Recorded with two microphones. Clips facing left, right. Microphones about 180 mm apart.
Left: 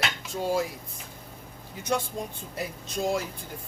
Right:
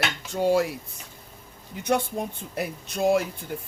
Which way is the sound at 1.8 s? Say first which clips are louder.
Right 4 dB; 65° right (ahead or behind).